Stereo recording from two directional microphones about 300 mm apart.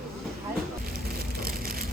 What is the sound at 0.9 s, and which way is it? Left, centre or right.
Rain on surface, right.